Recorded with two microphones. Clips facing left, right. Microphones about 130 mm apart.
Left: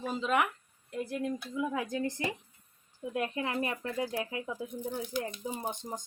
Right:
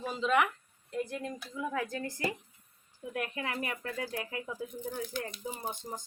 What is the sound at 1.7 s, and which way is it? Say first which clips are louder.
Speech: left 2 dB; 20° left (ahead or behind).